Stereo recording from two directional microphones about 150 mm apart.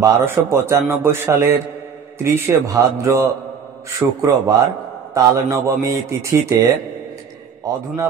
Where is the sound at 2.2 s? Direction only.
20° right (ahead or behind).